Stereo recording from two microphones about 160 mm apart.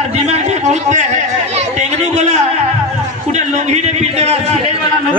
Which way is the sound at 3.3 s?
45° right (ahead or behind).